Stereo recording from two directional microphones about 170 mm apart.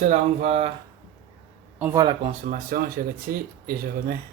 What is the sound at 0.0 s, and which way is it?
Speech, 40° right (ahead or behind).